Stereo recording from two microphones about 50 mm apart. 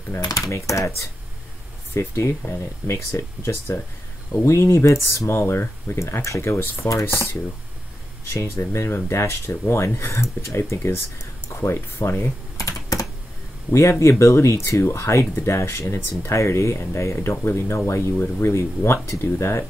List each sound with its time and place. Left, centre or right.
0.1 s speech: left
0.5 s speech: left
2.0 s speech: left
6.2 s speech: left
6.5 s speech: left
8.5 s speech: left
11.4 s speech: left
11.7 s speech: left
13.7 s speech: left
17.6 s speech: left
18.4 s speech: left
19.0 s speech: left